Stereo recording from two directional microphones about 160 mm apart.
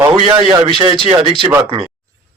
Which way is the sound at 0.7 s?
30° right (ahead or behind).